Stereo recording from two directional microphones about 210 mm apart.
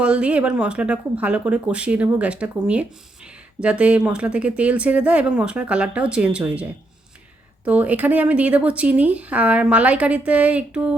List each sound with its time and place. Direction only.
0.0 s speech: 5° right (ahead or behind)